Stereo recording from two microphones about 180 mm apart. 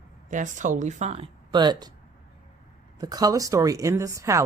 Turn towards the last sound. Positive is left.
turn(degrees=-15)  # may be behind; listen again after turning